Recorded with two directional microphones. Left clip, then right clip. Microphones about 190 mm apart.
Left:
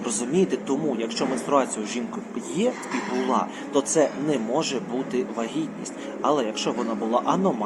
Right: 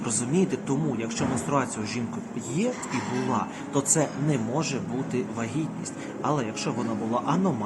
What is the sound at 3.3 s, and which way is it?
A man's voice, 10° right (ahead or behind).